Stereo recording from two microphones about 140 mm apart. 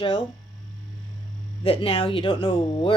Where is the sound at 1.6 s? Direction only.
40° left (ahead or behind).